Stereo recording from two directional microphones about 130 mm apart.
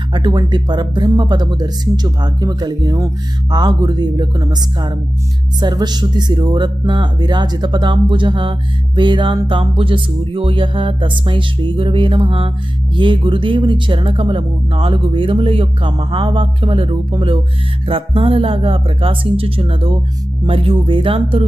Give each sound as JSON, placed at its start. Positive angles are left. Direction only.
{"t": 0.1, "sound": "speech", "side_deg": -35}